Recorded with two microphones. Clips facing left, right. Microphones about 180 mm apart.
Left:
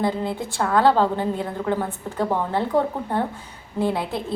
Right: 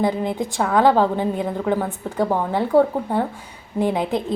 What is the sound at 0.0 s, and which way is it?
A woman's voice, 15° right (ahead or behind).